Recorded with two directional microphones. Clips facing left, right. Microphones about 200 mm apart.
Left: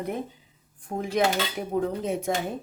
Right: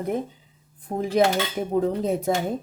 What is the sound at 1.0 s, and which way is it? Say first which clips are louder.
Speech: right 4 dB; 35° right (ahead or behind).